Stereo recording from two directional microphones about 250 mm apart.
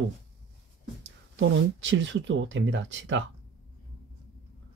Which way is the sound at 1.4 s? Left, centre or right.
Right.